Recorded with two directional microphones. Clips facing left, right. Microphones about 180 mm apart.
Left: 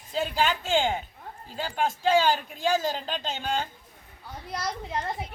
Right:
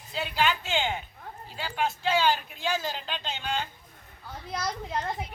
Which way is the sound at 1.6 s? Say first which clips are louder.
Left 2 dB; 45° left (ahead or behind).